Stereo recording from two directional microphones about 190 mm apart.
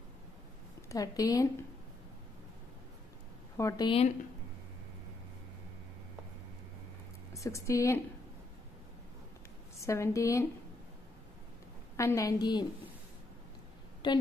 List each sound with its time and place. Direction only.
0.8 s a woman's voice: 20° left (ahead or behind)
3.5 s a woman's voice: 20° left (ahead or behind)
7.3 s a woman's voice: 15° left (ahead or behind)
9.8 s a woman's voice: 15° left (ahead or behind)
12.0 s a woman's voice: 15° left (ahead or behind)
14.0 s a woman's voice: 25° left (ahead or behind)